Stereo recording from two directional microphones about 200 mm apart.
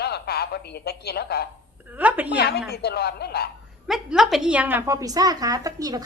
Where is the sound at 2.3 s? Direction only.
55° left (ahead or behind).